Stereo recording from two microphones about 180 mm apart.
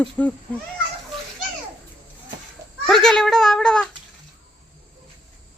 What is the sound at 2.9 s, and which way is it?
Babbling, 5° left (ahead or behind).